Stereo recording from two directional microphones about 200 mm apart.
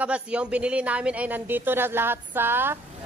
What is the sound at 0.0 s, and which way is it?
Speech, 5° right (ahead or behind).